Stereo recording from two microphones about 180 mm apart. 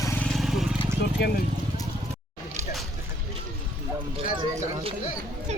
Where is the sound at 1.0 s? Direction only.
65° left (ahead or behind).